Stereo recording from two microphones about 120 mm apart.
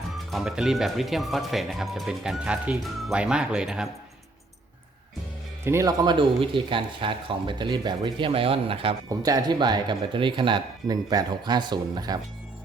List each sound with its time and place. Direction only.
0.3 s speech: 5° right (ahead or behind)
5.6 s speech: 25° right (ahead or behind); by 9.0 s 50° right (ahead or behind)
9.0 s speech: 30° right (ahead or behind)